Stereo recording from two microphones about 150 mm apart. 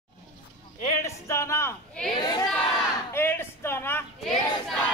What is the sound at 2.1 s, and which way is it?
Speech, 30° left (ahead or behind).